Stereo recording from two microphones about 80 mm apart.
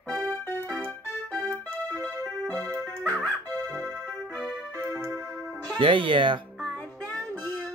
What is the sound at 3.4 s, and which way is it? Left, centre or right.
Music, right.